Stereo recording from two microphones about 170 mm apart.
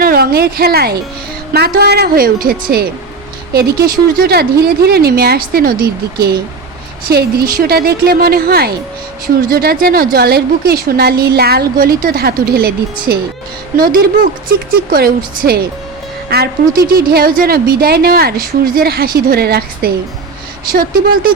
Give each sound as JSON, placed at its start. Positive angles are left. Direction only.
{"t": 0.0, "sound": "a woman's voice", "side_deg": -65}